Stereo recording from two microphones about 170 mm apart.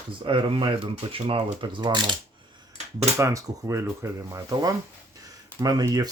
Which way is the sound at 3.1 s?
15° right (ahead or behind).